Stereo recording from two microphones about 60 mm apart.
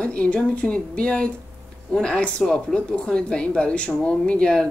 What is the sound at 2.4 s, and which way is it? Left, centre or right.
Speech, centre.